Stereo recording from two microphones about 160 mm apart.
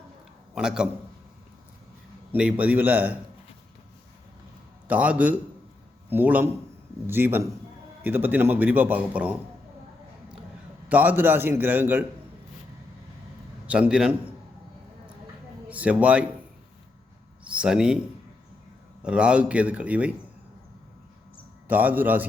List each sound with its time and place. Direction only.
0.5 s a man's voice: 5° right (ahead or behind)
2.3 s speech: 10° right (ahead or behind)
4.9 s speech: 10° right (ahead or behind)
10.8 s speech: 10° right (ahead or behind)
13.7 s speech: 5° right (ahead or behind)
15.7 s speech: 10° right (ahead or behind)
17.4 s speech: 5° right (ahead or behind)
19.0 s speech: 5° right (ahead or behind)
21.7 s speech: 10° right (ahead or behind)